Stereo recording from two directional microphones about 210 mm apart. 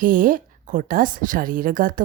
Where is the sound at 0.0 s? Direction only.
40° right (ahead or behind).